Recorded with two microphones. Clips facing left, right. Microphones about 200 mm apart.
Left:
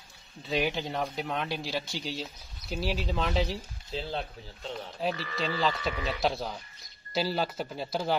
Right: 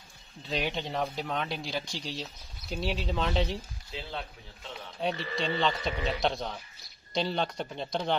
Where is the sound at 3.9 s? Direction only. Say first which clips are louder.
Left 5 dB; 30° left (ahead or behind).